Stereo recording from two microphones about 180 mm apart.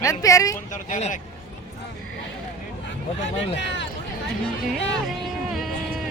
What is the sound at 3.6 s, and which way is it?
Speech, 80° left.